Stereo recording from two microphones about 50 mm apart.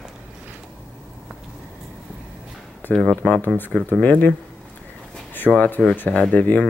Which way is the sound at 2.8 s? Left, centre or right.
Left.